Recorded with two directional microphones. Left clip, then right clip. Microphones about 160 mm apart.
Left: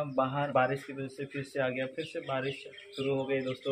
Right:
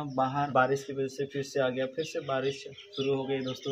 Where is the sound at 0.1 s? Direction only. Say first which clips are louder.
Right 3 dB; 20° right (ahead or behind).